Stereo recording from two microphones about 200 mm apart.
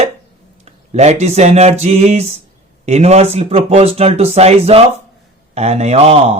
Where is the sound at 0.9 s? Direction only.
35° right (ahead or behind).